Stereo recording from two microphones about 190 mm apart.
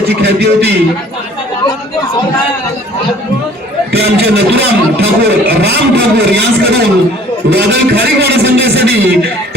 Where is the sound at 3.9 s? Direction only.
60° right (ahead or behind).